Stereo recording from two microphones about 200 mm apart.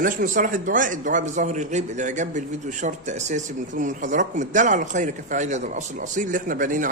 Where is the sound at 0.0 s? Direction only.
45° right (ahead or behind).